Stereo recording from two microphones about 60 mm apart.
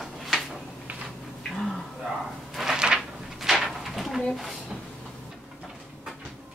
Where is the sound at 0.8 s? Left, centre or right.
Right.